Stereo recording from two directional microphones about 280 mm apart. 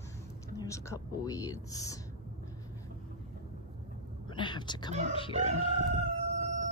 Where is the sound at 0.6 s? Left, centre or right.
Centre.